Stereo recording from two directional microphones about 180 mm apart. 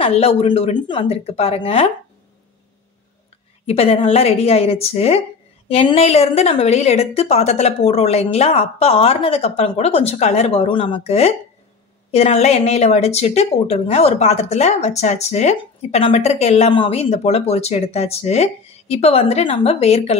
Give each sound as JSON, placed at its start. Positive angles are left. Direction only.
{"t": 0.0, "sound": "speech", "side_deg": 35}
{"t": 3.6, "sound": "speech", "side_deg": 35}